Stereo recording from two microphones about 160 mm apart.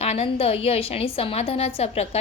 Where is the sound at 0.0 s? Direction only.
40° left (ahead or behind).